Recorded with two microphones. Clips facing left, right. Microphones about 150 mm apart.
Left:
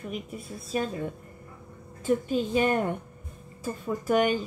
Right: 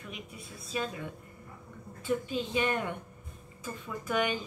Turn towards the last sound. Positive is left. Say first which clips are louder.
# left 7 dB
turn(degrees=45)  # may be behind; listen again after turning